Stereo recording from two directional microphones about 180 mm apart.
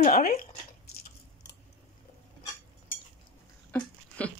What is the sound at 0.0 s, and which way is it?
Speech, 40° left (ahead or behind).